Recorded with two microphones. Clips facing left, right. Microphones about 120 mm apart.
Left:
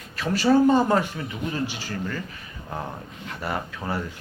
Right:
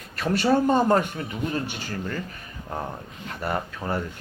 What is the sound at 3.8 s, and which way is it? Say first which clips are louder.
Speech: right 1 dB; 10° left (ahead or behind).